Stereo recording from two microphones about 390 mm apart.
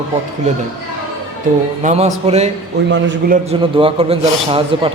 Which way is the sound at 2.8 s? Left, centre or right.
Right.